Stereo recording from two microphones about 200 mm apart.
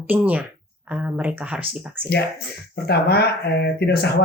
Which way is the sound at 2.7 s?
55° left (ahead or behind).